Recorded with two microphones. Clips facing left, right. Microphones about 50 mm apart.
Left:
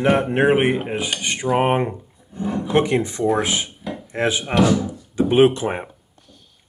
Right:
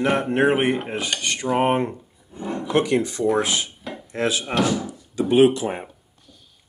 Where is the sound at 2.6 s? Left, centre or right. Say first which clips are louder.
Left 1 dB; left.